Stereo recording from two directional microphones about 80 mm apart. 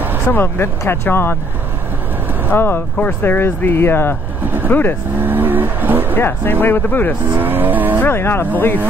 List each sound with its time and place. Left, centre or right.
0.3 s speech: left
2.5 s speech: left
5.2 s speech: right
6.1 s speech: left
7.3 s speech: right
8.0 s speech: left